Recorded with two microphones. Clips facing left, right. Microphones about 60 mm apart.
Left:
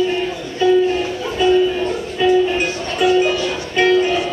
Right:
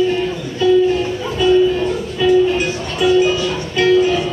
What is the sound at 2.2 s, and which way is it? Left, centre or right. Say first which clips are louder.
Music: right 1 dB; centre.